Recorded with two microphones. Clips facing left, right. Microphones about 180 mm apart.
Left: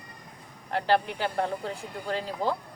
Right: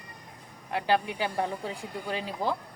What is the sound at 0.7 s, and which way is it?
Speech, 15° right (ahead or behind).